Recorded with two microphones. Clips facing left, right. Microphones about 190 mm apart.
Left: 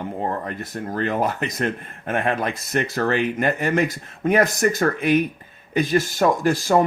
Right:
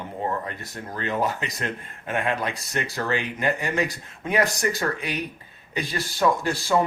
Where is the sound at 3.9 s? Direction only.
45° left (ahead or behind).